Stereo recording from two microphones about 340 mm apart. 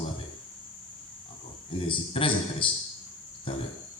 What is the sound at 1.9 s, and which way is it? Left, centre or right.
Speech, centre.